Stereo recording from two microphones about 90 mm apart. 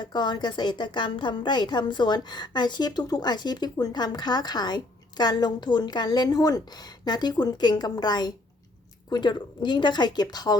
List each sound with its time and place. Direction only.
0.0 s a woman's voice: 55° left (ahead or behind)